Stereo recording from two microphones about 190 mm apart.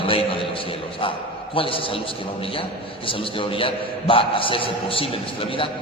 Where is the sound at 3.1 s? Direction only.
30° left (ahead or behind).